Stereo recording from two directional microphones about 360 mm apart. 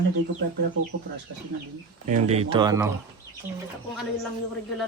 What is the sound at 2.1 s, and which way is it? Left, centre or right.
Speech, centre.